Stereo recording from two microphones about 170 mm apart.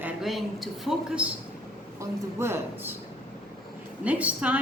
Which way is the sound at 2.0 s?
15° right (ahead or behind).